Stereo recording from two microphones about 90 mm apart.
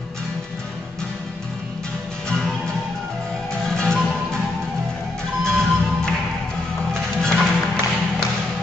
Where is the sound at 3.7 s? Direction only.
10° left (ahead or behind).